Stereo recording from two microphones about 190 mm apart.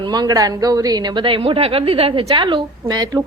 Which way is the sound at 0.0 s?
20° right (ahead or behind).